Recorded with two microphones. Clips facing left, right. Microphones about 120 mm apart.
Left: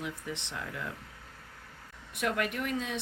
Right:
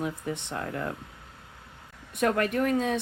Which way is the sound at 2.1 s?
45° right (ahead or behind).